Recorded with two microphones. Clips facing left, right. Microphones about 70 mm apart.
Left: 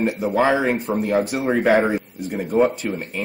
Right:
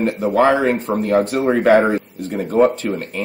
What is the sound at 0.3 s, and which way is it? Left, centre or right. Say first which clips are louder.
Speech: right 4 dB; centre.